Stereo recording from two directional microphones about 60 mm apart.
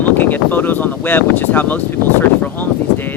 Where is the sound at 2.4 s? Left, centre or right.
Left.